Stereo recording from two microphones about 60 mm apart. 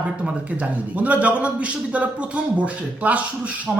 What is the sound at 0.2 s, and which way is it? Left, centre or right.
A man's voice, right.